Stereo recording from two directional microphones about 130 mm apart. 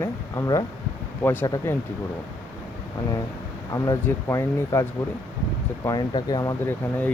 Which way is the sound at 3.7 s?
25° left (ahead or behind).